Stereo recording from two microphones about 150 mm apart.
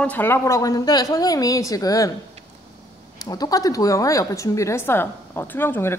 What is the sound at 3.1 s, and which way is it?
Speech, 25° left (ahead or behind).